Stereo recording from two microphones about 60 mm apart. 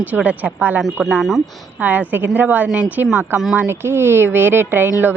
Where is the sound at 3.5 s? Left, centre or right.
Right.